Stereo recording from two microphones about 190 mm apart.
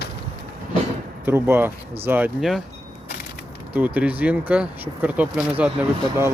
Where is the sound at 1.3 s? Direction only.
10° right (ahead or behind).